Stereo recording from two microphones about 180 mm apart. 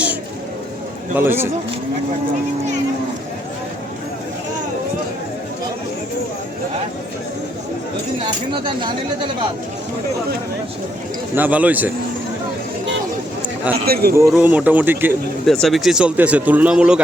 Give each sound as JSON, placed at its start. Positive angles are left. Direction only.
{"t": 1.1, "sound": "speech", "side_deg": -10}
{"t": 8.5, "sound": "speech", "side_deg": -25}
{"t": 11.3, "sound": "speech", "side_deg": -10}
{"t": 13.8, "sound": "a man's voice", "side_deg": -60}
{"t": 14.3, "sound": "speech", "side_deg": -5}
{"t": 15.4, "sound": "speech", "side_deg": 0}